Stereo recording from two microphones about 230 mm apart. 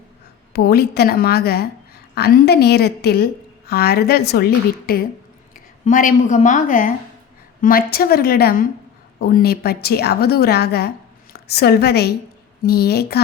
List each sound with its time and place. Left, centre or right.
0.5 s a woman's voice: left